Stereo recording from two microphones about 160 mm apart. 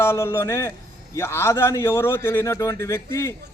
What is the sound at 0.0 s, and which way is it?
A man's voice, 15° left (ahead or behind).